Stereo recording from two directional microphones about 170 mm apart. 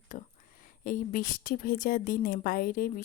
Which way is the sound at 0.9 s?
55° left (ahead or behind).